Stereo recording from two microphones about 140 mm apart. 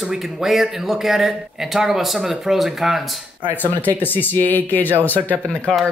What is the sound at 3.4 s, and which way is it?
Speech, 15° left (ahead or behind).